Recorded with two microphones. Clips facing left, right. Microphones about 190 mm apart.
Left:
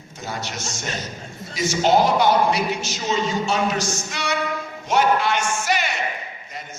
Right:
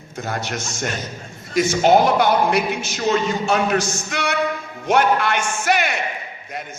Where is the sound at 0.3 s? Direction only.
55° right (ahead or behind).